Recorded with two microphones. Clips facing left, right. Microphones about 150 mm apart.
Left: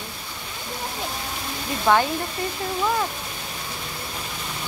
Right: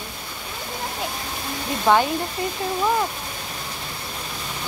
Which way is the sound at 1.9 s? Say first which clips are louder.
Right 1 dB; 15° right (ahead or behind).